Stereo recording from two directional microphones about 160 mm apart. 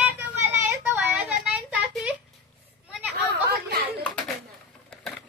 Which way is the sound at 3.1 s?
80° right.